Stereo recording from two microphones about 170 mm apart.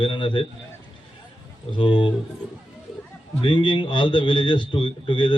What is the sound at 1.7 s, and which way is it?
Speech, 30° left (ahead or behind).